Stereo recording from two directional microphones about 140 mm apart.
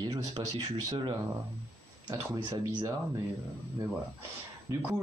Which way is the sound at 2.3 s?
25° right (ahead or behind).